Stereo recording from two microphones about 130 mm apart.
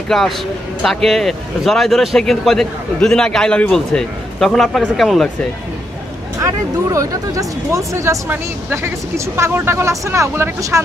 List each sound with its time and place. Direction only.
0.1 s speech: centre (ahead or behind)
6.9 s speech: 25° right (ahead or behind)